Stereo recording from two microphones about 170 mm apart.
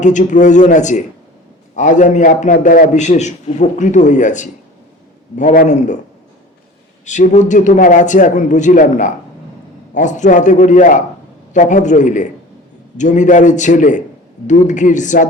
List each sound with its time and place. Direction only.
0.0 s a man's voice: 45° left (ahead or behind)
7.0 s a man's voice: 45° left (ahead or behind)